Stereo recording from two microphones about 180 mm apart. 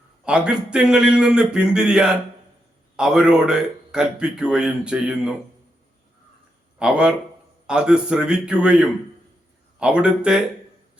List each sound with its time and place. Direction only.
0.3 s a man's voice: 5° right (ahead or behind)
6.7 s a man's voice: 5° right (ahead or behind)